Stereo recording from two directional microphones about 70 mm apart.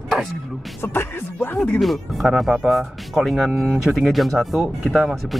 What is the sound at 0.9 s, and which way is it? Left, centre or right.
Speech, left.